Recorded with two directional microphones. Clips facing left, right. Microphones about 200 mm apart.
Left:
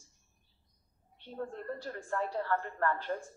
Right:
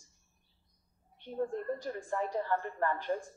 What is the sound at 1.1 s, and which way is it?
A woman's voice, 15° right (ahead or behind).